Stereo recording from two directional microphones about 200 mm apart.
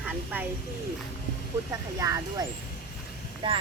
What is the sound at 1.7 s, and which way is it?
Speech, 15° right (ahead or behind).